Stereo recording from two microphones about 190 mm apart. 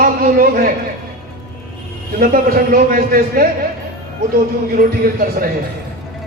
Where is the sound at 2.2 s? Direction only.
50° right (ahead or behind).